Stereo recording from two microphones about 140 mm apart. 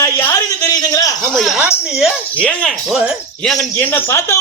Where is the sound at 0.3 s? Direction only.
30° left (ahead or behind).